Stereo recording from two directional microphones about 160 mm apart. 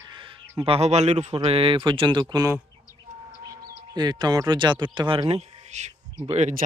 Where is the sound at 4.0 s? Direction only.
25° right (ahead or behind).